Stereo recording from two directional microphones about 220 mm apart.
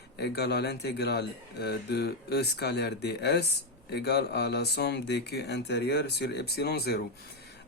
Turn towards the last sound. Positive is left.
turn(degrees=45)  # may be behind; listen again after turning